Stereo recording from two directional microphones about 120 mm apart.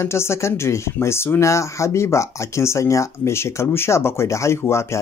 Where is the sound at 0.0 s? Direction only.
20° left (ahead or behind).